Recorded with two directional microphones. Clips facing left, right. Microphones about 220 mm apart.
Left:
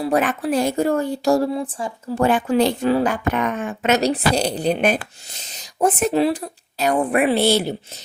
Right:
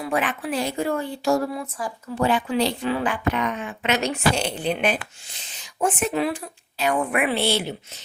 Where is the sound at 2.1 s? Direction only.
45° left (ahead or behind).